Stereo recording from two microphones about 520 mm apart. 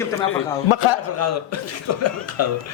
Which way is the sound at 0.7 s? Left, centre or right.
Left.